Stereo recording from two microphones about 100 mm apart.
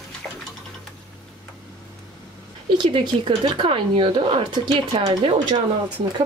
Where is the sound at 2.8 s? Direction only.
55° right (ahead or behind).